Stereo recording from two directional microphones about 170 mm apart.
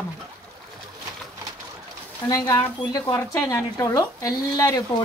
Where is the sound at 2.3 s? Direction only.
15° left (ahead or behind).